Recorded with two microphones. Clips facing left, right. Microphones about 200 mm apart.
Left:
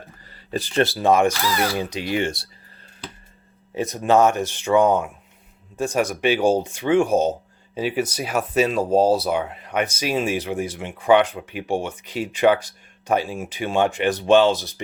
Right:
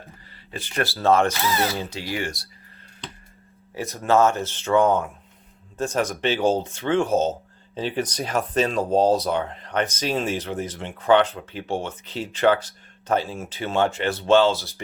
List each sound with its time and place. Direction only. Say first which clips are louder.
0.3 s a sound: left 10 dB; 40° left (ahead or behind)
0.8 s speech: left 2 dB; 15° left (ahead or behind)
1.3 s speech: left 1 dB; 20° right (ahead or behind)
1.7 s speech: left 5 dB; 15° left (ahead or behind)
3.8 s speech: left 2 dB; 20° left (ahead or behind)